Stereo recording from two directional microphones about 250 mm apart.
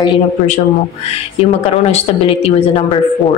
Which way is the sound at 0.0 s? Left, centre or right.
Left.